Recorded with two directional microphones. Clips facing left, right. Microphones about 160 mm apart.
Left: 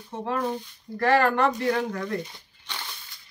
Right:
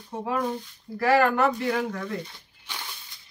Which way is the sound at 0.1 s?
10° right (ahead or behind).